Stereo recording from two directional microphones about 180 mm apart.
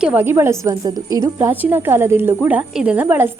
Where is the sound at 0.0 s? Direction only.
10° right (ahead or behind).